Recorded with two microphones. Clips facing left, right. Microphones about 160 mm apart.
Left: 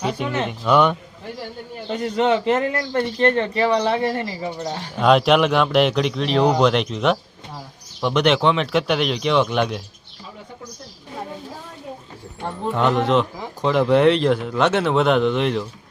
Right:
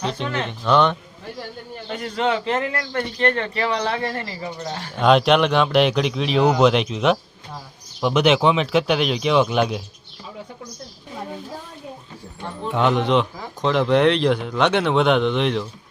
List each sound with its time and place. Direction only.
0.0 s a man's voice: 10° left (ahead or behind)
1.9 s speech: 20° left (ahead or behind)
4.9 s speech: centre (ahead or behind)
12.6 s speech: centre (ahead or behind)